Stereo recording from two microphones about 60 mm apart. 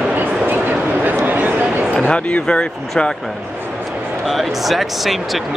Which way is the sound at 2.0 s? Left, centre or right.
Centre.